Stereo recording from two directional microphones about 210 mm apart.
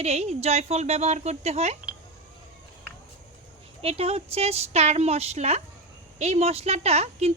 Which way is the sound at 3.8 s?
30° right (ahead or behind).